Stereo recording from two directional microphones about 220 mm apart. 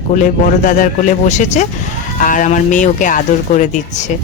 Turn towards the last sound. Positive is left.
turn(degrees=35)  # may be behind; listen again after turning